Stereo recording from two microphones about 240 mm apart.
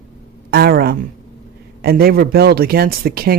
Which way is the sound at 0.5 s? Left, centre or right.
Right.